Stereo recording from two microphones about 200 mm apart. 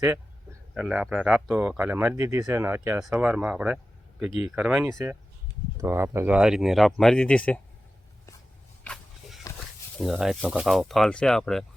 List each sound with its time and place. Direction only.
0.7 s speech: centre (ahead or behind)
8.8 s a sound: 5° left (ahead or behind)
10.0 s speech: centre (ahead or behind)